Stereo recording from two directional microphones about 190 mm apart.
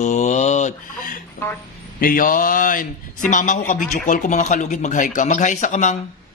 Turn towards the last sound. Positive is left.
turn(degrees=40)  # may be behind; listen again after turning